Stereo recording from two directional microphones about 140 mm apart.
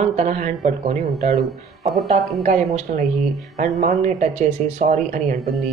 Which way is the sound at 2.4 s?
60° right (ahead or behind).